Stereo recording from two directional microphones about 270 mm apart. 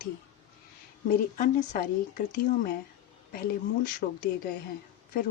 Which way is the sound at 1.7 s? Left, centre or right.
Left.